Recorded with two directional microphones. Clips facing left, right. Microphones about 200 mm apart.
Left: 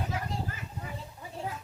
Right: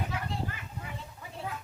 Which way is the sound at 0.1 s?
35° left (ahead or behind).